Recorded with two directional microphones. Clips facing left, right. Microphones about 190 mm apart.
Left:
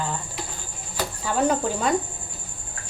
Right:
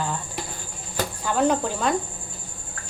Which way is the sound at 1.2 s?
Centre (ahead or behind).